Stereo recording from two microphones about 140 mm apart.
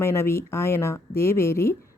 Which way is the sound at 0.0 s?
20° left (ahead or behind).